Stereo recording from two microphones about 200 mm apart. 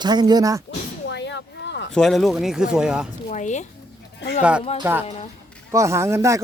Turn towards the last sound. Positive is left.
turn(degrees=-15)  # may be behind; listen again after turning